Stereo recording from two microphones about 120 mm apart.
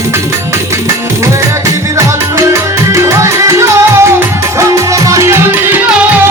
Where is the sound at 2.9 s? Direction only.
25° right (ahead or behind).